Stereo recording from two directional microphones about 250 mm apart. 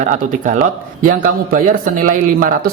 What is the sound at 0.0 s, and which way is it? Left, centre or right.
Speech, right.